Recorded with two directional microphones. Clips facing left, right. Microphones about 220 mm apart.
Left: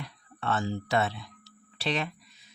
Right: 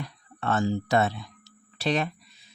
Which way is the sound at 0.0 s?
45° right (ahead or behind).